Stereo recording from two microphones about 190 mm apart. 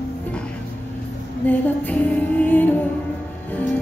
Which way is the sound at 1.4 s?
10° left (ahead or behind).